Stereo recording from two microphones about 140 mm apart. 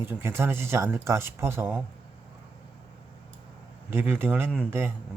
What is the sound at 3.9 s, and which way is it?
Speech, 15° right (ahead or behind).